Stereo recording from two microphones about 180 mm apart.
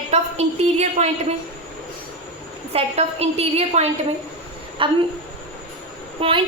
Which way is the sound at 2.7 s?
35° right (ahead or behind).